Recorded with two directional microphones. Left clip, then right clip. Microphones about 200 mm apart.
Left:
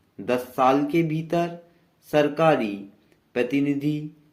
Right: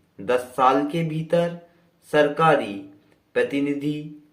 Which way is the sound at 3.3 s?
45° left (ahead or behind).